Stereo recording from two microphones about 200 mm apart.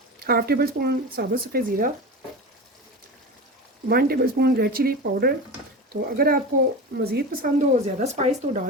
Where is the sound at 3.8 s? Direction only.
50° right (ahead or behind).